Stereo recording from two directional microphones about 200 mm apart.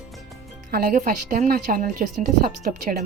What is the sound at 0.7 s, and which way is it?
A woman's voice, 45° right (ahead or behind).